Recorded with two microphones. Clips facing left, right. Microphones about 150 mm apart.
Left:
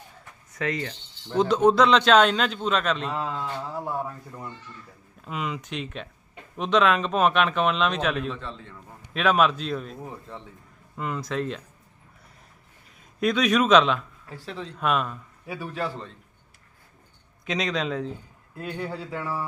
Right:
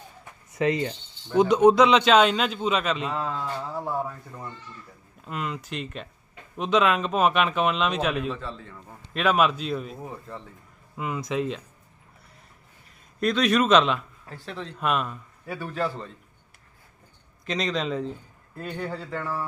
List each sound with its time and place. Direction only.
0.5 s mechanisms: 25° right (ahead or behind)
1.3 s a man's voice: 10° right (ahead or behind)
13.1 s a man's voice: centre (ahead or behind)
17.4 s a man's voice: centre (ahead or behind)